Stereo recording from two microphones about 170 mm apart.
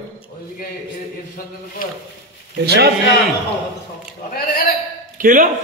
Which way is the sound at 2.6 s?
70° right (ahead or behind).